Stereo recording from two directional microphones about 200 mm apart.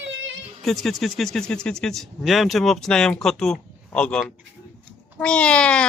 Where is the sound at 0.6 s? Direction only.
Centre (ahead or behind).